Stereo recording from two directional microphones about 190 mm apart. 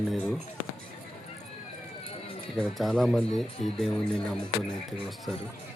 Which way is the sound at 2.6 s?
5° left (ahead or behind).